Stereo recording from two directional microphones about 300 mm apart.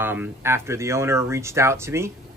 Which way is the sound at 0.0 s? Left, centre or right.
Centre.